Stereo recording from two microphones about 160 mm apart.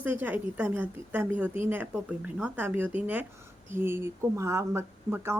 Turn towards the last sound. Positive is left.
turn(degrees=-15)  # may be behind; listen again after turning